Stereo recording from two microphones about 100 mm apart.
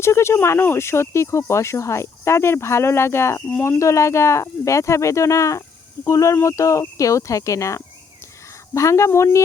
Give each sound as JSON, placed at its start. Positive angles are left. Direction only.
{"t": 0.0, "sound": "speech", "side_deg": 25}